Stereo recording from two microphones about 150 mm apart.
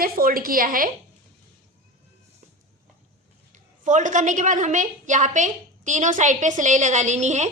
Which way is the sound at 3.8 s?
55° right (ahead or behind).